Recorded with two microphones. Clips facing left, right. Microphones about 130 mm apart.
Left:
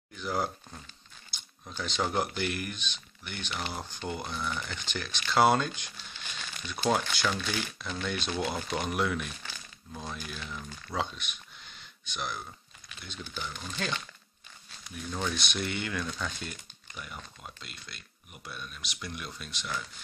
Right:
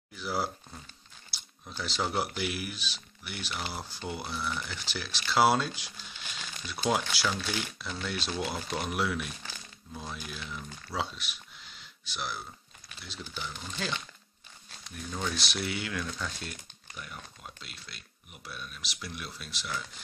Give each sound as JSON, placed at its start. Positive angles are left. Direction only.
{"t": 0.1, "sound": "speech", "side_deg": -5}
{"t": 1.3, "sound": "a sound", "side_deg": -5}
{"t": 1.7, "sound": "speech", "side_deg": -5}